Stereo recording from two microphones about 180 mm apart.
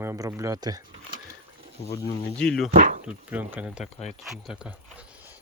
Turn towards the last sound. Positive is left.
turn(degrees=-5)  # may be behind; listen again after turning